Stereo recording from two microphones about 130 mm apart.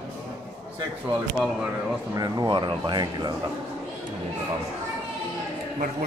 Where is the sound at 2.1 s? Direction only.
30° right (ahead or behind).